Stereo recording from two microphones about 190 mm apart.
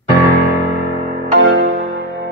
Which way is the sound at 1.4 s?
90° right.